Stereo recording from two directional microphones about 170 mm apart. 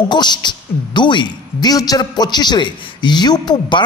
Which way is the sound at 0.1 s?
25° left (ahead or behind).